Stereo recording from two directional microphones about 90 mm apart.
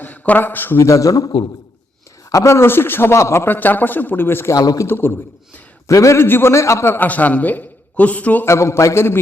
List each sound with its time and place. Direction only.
0.0 s a man's voice: 15° left (ahead or behind); by 1.3 s 40° left (ahead or behind)
2.3 s a man's voice: 30° left (ahead or behind)
4.5 s a man's voice: 40° left (ahead or behind)
4.9 s a man's voice: 25° left (ahead or behind)
8.4 s a man's voice: 30° left (ahead or behind)